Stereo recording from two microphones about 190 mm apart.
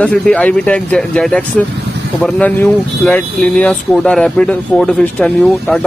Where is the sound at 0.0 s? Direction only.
5° left (ahead or behind).